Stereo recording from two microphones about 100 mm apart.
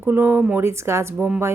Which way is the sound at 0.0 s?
20° right (ahead or behind).